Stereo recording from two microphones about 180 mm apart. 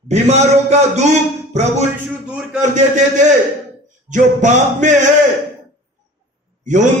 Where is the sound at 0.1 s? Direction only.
40° right (ahead or behind).